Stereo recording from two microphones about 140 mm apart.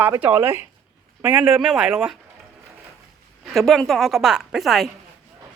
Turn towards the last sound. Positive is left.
turn(degrees=0)  # may be behind; listen again after turning